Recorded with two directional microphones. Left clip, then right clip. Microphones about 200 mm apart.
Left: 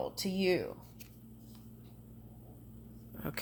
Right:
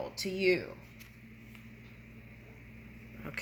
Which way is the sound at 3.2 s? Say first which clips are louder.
Even; 55° left (ahead or behind).